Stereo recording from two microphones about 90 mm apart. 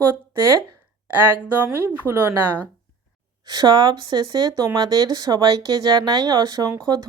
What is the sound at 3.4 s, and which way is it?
Speech, 50° right (ahead or behind).